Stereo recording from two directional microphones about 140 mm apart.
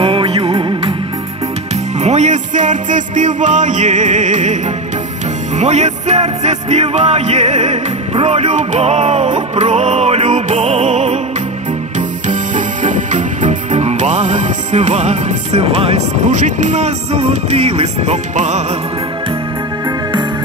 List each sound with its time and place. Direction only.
0.0 s music: 40° right (ahead or behind)
2.0 s music: 55° right (ahead or behind)
5.6 s music: 55° right (ahead or behind)
12.3 s music: 65° right (ahead or behind)